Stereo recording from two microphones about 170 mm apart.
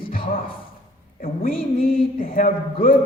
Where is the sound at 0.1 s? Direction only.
55° left (ahead or behind).